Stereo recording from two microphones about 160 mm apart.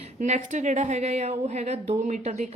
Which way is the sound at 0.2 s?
50° right (ahead or behind).